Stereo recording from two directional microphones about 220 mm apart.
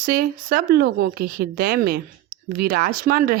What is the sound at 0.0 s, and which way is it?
Speech, 40° right (ahead or behind).